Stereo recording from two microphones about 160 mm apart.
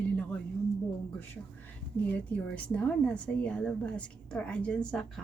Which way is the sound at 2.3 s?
10° left (ahead or behind).